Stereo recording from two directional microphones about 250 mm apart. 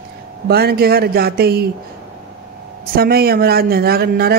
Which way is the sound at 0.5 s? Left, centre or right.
Right.